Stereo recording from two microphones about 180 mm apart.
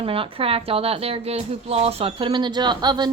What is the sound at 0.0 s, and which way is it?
A woman's voice, 30° right (ahead or behind).